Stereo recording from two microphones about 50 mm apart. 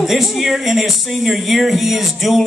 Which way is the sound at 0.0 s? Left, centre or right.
Centre.